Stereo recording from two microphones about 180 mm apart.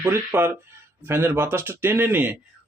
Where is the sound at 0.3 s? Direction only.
10° right (ahead or behind).